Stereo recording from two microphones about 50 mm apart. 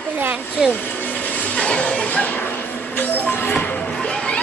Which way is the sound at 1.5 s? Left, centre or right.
Centre.